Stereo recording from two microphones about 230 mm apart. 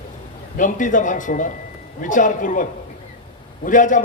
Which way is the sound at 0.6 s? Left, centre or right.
Left.